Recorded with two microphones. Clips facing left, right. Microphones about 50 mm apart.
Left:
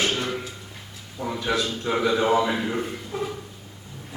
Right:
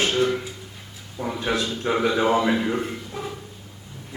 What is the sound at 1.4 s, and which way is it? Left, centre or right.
Speech, right.